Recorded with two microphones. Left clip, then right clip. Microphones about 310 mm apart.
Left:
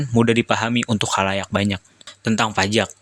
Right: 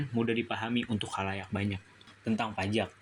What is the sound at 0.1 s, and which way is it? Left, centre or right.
Speech, left.